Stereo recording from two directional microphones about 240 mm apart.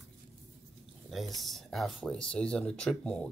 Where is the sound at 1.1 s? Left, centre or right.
Centre.